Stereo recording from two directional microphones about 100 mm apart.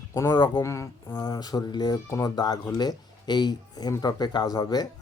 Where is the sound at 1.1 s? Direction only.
40° left (ahead or behind).